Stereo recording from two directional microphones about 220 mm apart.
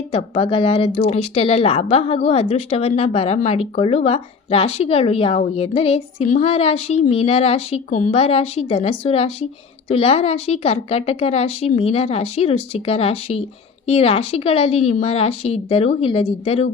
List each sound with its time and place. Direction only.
0.1 s speech: 25° left (ahead or behind)
8.1 s speech: 25° left (ahead or behind)